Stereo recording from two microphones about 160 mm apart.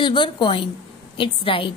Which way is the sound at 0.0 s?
30° left (ahead or behind).